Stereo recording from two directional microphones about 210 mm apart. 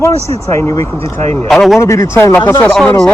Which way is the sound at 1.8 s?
15° left (ahead or behind).